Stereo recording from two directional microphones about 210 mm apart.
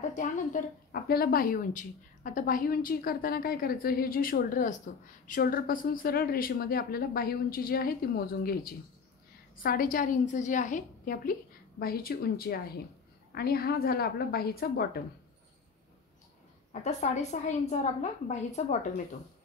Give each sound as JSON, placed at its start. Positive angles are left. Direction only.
{"t": 0.1, "sound": "a woman's voice", "side_deg": 35}
{"t": 16.8, "sound": "a woman's voice", "side_deg": 35}